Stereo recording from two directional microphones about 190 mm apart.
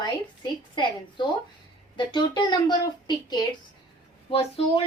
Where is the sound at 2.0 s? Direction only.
25° left (ahead or behind).